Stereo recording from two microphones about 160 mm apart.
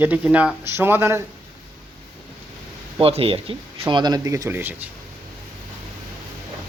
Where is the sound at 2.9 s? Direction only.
35° right (ahead or behind); by 4.9 s 15° right (ahead or behind).